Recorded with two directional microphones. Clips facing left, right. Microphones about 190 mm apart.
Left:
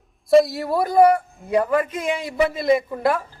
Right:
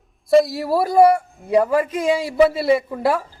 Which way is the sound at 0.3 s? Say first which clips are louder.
Even; centre (ahead or behind).